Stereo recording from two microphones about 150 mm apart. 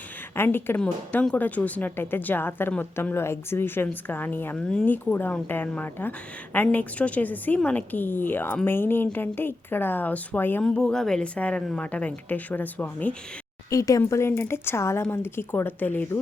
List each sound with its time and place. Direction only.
0.3 s a woman's voice: 15° left (ahead or behind)
13.7 s a woman's voice: 20° left (ahead or behind)